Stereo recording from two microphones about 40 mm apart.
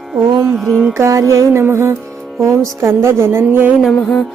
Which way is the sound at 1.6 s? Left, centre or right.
Right.